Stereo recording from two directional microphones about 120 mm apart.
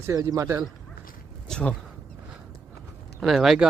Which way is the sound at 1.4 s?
5° left (ahead or behind).